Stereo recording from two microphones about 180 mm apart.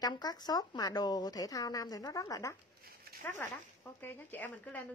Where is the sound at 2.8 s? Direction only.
55° right (ahead or behind).